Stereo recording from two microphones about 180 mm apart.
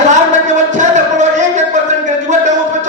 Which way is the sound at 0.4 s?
40° right (ahead or behind).